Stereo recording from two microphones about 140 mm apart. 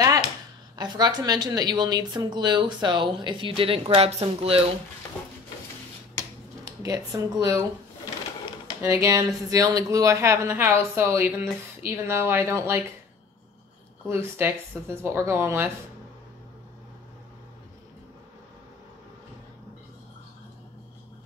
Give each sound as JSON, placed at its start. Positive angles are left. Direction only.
{"t": 0.7, "sound": "speech", "side_deg": -30}
{"t": 6.6, "sound": "speech", "side_deg": -25}
{"t": 8.8, "sound": "speech", "side_deg": -25}
{"t": 14.0, "sound": "speech", "side_deg": -15}